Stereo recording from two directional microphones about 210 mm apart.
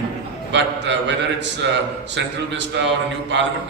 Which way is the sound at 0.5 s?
60° right (ahead or behind).